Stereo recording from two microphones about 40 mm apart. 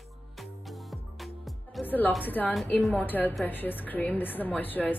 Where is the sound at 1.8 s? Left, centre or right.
Left.